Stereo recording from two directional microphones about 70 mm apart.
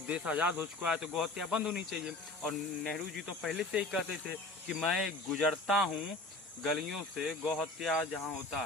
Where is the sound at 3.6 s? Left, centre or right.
Centre.